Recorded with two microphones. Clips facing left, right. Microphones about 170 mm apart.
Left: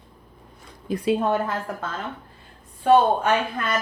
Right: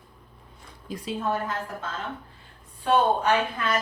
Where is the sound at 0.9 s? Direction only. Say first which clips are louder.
Left 7 dB; 60° left (ahead or behind).